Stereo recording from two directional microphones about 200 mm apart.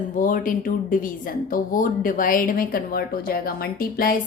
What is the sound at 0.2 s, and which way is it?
A woman's voice, 45° left (ahead or behind).